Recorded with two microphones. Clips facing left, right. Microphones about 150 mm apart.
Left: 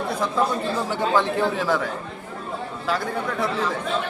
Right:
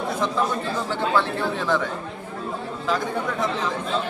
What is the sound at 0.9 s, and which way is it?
A man's voice, 15° left (ahead or behind).